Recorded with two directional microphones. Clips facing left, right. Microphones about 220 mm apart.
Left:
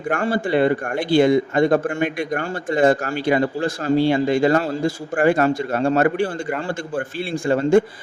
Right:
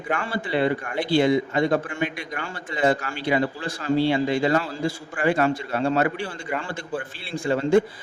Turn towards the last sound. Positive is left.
turn(degrees=45)  # may be behind; listen again after turning